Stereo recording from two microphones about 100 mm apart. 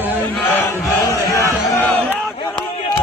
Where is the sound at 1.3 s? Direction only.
25° left (ahead or behind).